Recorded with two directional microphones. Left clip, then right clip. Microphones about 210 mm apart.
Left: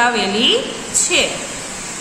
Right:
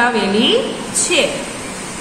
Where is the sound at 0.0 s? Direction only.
10° left (ahead or behind).